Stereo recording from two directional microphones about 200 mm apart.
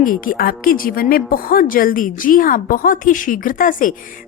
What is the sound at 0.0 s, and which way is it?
A woman's voice, 45° left (ahead or behind).